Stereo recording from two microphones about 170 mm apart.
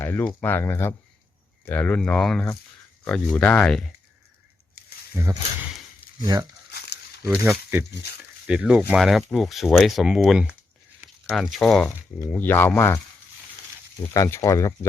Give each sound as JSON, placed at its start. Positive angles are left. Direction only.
{"t": 0.0, "sound": "speech", "side_deg": 10}
{"t": 5.1, "sound": "speech", "side_deg": -20}
{"t": 6.7, "sound": "a sound", "side_deg": 75}
{"t": 7.4, "sound": "speech", "side_deg": -10}
{"t": 14.1, "sound": "speech", "side_deg": 15}